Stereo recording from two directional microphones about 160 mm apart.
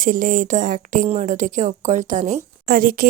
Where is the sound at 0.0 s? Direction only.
55° right (ahead or behind).